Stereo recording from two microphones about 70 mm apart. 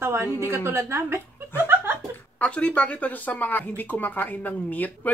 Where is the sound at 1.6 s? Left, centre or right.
Right.